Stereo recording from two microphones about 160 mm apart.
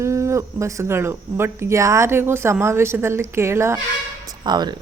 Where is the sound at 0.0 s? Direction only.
20° right (ahead or behind).